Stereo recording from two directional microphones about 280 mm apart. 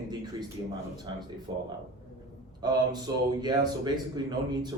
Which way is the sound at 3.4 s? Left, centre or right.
Centre.